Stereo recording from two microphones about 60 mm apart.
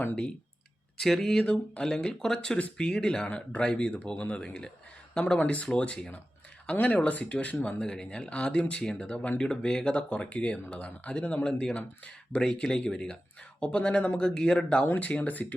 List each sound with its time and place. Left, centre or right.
0.9 s speech: centre
3.2 s speech: left
9.0 s speech: left
12.4 s speech: centre; by 15.5 s left